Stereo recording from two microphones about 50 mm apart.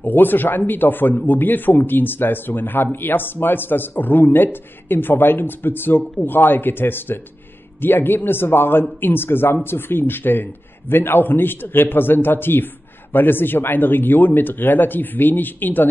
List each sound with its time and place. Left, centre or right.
0.0 s a man's voice: left